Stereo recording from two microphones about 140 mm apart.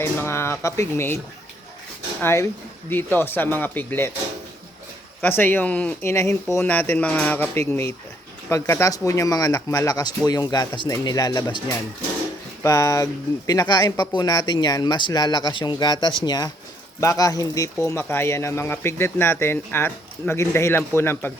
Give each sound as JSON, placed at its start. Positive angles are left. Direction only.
{"t": 0.0, "sound": "speech", "side_deg": 15}
{"t": 2.2, "sound": "speech", "side_deg": 20}
{"t": 5.2, "sound": "speech", "side_deg": 15}